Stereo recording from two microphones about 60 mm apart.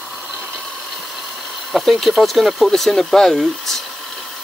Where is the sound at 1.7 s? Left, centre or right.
Centre.